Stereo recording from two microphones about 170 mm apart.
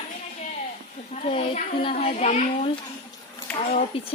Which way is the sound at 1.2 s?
35° left (ahead or behind).